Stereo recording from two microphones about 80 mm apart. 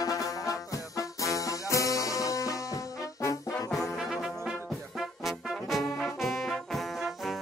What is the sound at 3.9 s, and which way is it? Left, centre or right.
Brass instrument, centre.